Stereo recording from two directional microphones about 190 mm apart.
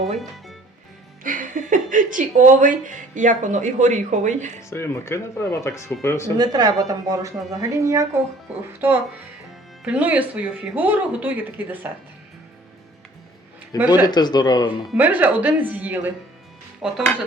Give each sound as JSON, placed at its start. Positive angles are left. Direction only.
{"t": 1.2, "sound": "speech", "side_deg": -45}
{"t": 4.7, "sound": "speech", "side_deg": 15}
{"t": 6.3, "sound": "speech", "side_deg": -20}
{"t": 13.7, "sound": "speech", "side_deg": -10}
{"t": 14.0, "sound": "speech", "side_deg": 20}
{"t": 14.8, "sound": "speech", "side_deg": -10}
{"t": 16.8, "sound": "dishes", "side_deg": -5}